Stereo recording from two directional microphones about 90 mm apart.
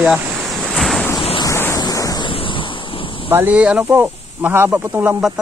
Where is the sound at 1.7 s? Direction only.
40° left (ahead or behind).